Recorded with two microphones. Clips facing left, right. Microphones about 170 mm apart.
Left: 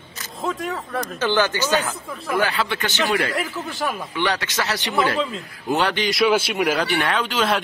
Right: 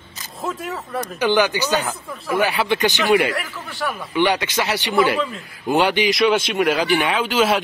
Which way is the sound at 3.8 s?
20° left (ahead or behind).